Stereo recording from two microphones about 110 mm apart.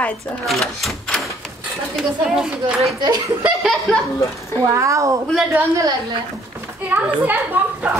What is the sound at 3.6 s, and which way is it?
Speech, centre (ahead or behind).